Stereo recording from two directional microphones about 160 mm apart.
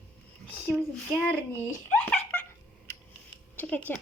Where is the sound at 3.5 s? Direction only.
10° left (ahead or behind).